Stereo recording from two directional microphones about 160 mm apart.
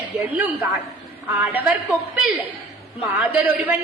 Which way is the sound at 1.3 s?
15° right (ahead or behind).